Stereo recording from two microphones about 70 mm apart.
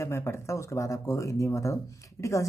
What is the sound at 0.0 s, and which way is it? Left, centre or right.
Speech, left.